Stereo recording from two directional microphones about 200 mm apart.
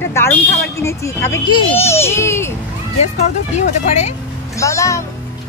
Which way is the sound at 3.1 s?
35° left (ahead or behind).